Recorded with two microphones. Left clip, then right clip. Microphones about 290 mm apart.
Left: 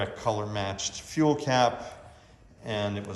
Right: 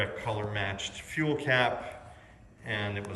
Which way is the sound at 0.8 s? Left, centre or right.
Left.